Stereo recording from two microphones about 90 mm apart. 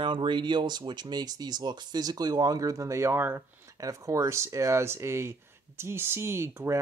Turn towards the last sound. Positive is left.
turn(degrees=-30)  # may be behind; listen again after turning